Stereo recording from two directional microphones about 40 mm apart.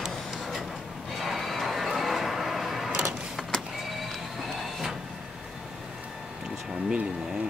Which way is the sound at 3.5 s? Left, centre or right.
Centre.